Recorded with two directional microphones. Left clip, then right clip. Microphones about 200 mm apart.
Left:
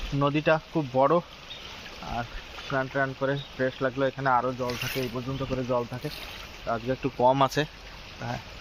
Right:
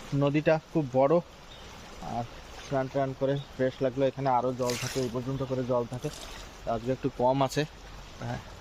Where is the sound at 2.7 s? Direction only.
5° right (ahead or behind).